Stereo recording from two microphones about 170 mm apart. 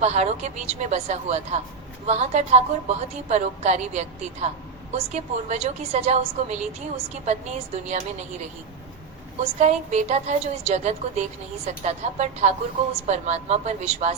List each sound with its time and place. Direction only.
0.0 s a woman's voice: 40° right (ahead or behind)
9.4 s a woman's voice: 40° right (ahead or behind)